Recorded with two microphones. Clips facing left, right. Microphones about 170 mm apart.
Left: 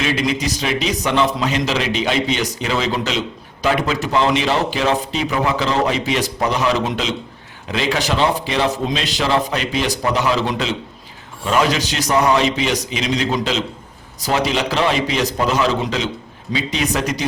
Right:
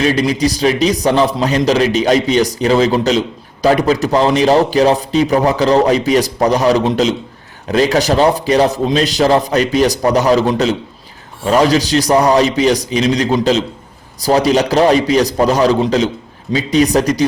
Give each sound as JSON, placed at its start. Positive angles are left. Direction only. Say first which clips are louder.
{"t": 0.0, "sound": "a man's voice", "louder": "right 6 dB", "side_deg": -40}